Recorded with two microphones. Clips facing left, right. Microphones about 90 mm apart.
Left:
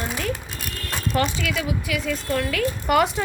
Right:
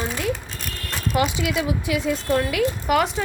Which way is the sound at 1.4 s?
20° right (ahead or behind).